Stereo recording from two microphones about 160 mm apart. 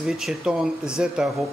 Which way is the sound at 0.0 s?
Centre (ahead or behind).